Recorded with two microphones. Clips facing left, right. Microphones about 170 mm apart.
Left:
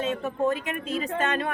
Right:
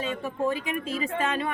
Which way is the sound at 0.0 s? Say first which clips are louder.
Left 2 dB; centre (ahead or behind).